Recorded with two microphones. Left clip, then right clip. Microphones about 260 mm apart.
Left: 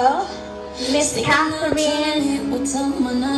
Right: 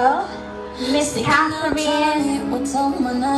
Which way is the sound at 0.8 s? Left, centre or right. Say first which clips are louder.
Left 1 dB; right.